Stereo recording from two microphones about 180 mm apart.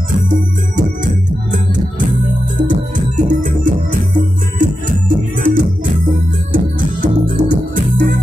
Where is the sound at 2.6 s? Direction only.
45° right (ahead or behind).